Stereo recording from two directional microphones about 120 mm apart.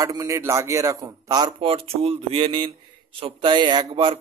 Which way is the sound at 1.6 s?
50° right (ahead or behind).